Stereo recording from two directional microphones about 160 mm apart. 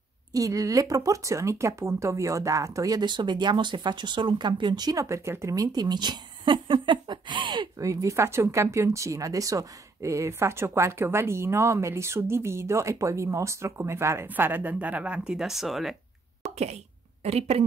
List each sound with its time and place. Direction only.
0.3 s speech: 20° right (ahead or behind); by 16.0 s centre (ahead or behind)
16.5 s speech: 40° right (ahead or behind)